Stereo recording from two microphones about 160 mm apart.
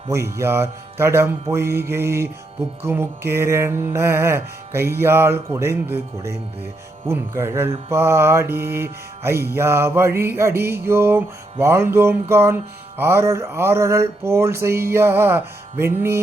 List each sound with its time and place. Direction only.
0.1 s music: 15° right (ahead or behind)